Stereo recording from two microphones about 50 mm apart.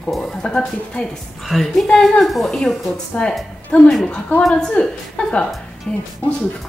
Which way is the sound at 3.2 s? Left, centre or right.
Left.